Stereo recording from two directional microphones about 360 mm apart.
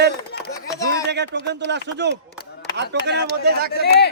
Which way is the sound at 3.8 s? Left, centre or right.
Left.